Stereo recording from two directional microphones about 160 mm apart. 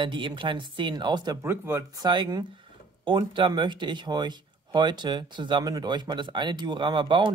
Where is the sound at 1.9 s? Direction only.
25° right (ahead or behind).